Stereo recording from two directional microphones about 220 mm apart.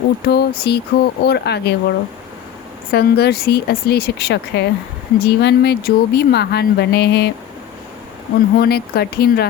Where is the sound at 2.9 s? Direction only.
45° left (ahead or behind).